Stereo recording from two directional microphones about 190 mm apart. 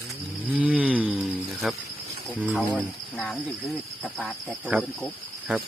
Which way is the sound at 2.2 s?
Centre (ahead or behind).